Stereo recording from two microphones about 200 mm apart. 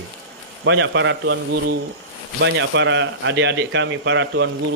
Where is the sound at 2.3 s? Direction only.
70° right (ahead or behind).